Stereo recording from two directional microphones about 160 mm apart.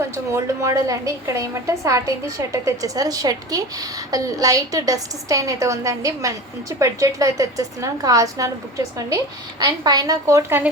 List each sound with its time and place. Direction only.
0.3 s a woman's voice: 20° right (ahead or behind)